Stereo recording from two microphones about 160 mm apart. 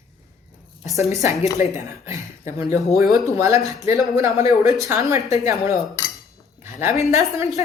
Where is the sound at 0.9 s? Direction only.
20° right (ahead or behind).